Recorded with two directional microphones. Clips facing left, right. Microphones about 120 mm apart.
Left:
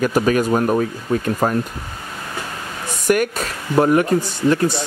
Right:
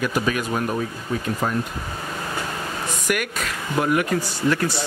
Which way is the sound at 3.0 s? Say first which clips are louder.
Left 9 dB; 35° left (ahead or behind).